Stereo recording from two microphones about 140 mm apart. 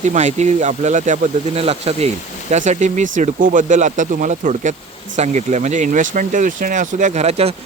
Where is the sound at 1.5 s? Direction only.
45° right (ahead or behind).